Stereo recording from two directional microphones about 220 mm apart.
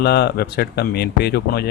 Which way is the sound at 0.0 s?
45° left (ahead or behind).